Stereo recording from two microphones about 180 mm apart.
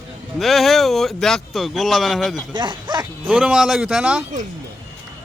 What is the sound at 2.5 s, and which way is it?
Speech, 25° right (ahead or behind).